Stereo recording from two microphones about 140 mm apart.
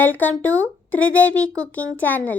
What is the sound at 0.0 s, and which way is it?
Speech, 15° left (ahead or behind).